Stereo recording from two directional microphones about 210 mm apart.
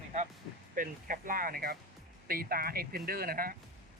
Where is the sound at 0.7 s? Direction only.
40° right (ahead or behind).